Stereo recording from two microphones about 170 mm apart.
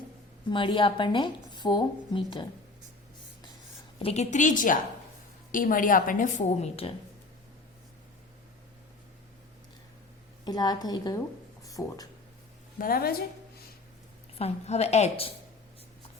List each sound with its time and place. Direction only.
0.5 s a woman's voice: 30° left (ahead or behind)
4.0 s a woman's voice: 40° left (ahead or behind)
10.4 s a woman's voice: 25° left (ahead or behind)
11.6 s a sound: 20° left (ahead or behind)
12.8 s a woman's voice: 60° left (ahead or behind)
14.3 s a woman's voice: 40° left (ahead or behind)